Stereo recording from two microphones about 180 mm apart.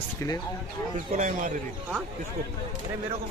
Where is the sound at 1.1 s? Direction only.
45° right (ahead or behind).